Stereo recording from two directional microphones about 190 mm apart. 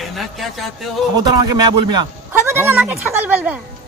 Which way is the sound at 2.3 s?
10° right (ahead or behind).